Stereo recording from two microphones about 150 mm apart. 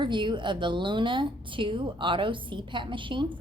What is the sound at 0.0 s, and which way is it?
A woman's voice, 30° right (ahead or behind).